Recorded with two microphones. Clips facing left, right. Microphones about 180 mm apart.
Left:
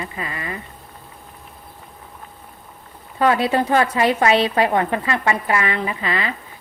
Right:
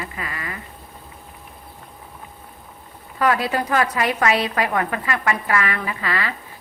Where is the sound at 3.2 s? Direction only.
25° left (ahead or behind).